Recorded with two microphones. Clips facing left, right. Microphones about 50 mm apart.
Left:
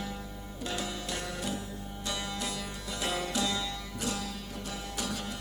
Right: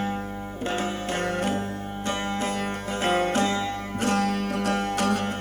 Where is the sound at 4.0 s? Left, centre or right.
Right.